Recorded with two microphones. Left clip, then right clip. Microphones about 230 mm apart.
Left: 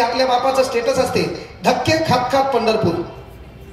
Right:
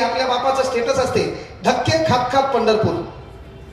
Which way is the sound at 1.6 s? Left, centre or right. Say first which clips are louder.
Left 1 dB; left.